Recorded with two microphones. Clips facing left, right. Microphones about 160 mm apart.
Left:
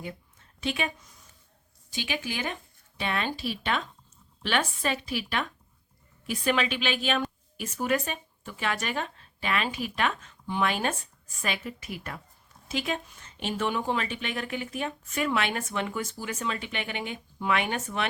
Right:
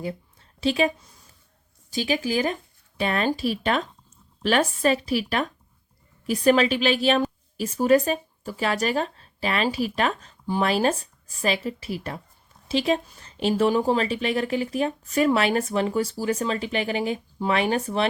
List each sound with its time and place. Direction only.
0.0 s a woman's voice: 35° right (ahead or behind)